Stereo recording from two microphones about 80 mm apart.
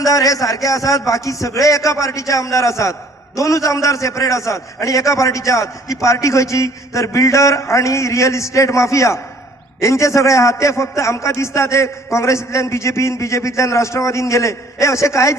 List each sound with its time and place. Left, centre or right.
0.0 s a man's voice: left